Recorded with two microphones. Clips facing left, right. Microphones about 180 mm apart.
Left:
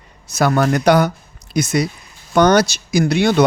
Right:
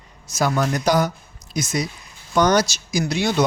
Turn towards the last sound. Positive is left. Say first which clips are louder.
# left 6 dB
turn(degrees=60)  # may be behind; listen again after turning